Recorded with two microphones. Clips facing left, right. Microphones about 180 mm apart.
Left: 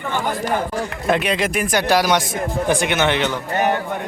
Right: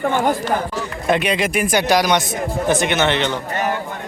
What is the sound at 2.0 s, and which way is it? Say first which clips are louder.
Speech: even; 5° left (ahead or behind).